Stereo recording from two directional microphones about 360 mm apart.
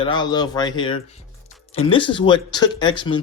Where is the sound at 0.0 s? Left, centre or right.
Centre.